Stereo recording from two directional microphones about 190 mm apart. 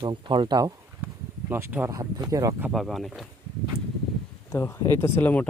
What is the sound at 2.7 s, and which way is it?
Speech, centre (ahead or behind).